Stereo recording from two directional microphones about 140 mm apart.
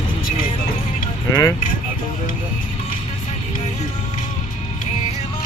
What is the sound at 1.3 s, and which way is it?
Vehicle, 20° left (ahead or behind).